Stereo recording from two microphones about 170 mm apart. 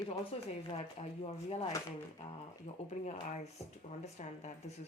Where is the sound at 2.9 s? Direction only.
40° left (ahead or behind).